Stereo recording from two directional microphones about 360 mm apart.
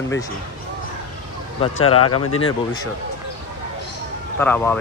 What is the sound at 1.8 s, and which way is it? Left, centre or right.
Speech, left.